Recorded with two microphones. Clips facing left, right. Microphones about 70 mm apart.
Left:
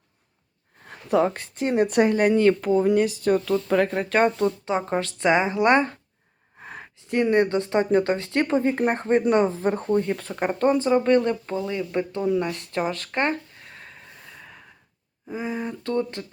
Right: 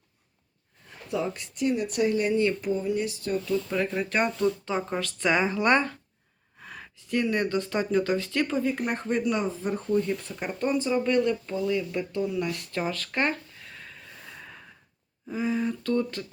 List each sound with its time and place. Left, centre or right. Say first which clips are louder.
0.9 s a sound: left 9 dB; left
1.5 s speech: left 4 dB; left
2.0 s speech: left 5 dB; left
2.7 s speech: left 8 dB; left
3.9 s speech: left 6 dB; left
6.6 s speech: left 4 dB; left
9.4 s speech: left 7 dB; left
13.1 s a sound: left 3 dB; left
14.3 s gasp: right 2 dB; centre
15.3 s speech: right 1 dB; left